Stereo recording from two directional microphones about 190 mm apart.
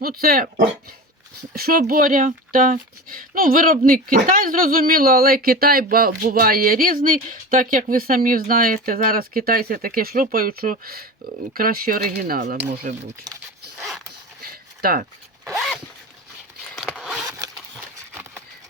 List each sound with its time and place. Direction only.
0.0 s speech: 50° right (ahead or behind)
13.3 s speech: 20° right (ahead or behind)
13.7 s zipper: centre (ahead or behind)
14.4 s a sound: 50° right (ahead or behind)
15.4 s zipper: centre (ahead or behind)